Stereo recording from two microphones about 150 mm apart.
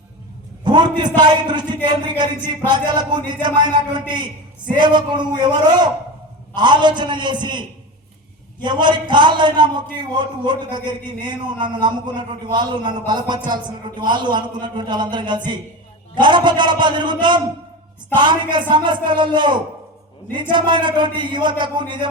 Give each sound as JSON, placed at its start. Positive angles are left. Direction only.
{"t": 0.6, "sound": "a man's voice", "side_deg": -30}